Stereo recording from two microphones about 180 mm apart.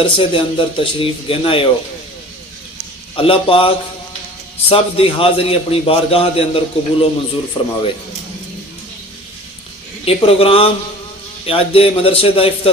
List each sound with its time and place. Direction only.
0.0 s speech: 30° left (ahead or behind)
3.2 s a man's voice: 30° left (ahead or behind)
10.0 s a man's voice: 30° left (ahead or behind)